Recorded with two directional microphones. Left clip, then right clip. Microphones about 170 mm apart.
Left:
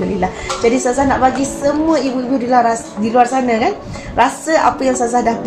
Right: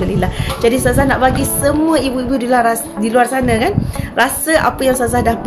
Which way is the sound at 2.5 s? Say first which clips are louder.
Left 1 dB; 25° right (ahead or behind).